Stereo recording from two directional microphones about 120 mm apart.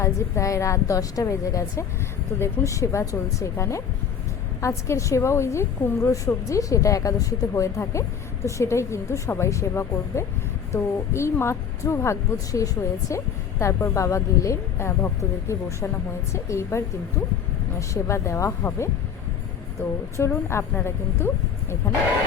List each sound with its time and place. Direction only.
0.0 s a woman's voice: 25° left (ahead or behind)
20.1 s a woman's voice: 20° left (ahead or behind)